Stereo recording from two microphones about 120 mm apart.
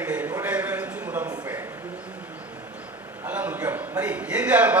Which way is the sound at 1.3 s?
25° right (ahead or behind).